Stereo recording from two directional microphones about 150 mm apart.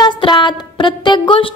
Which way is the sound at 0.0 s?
30° left (ahead or behind).